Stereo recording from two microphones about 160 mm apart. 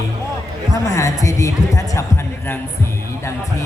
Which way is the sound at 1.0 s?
20° left (ahead or behind).